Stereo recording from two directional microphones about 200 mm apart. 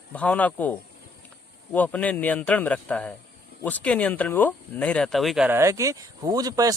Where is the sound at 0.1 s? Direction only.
5° left (ahead or behind).